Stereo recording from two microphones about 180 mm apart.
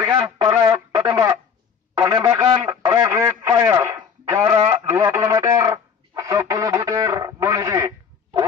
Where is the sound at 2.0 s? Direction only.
15° right (ahead or behind).